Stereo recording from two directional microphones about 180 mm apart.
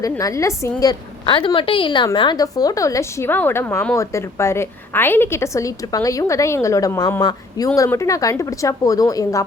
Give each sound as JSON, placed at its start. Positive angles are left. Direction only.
{"t": 0.0, "sound": "a woman's voice", "side_deg": 20}